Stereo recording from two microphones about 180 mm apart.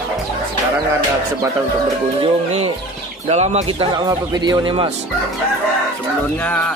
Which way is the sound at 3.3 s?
40° right (ahead or behind).